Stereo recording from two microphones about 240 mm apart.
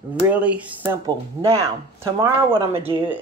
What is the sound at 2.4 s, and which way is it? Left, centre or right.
Speech, right.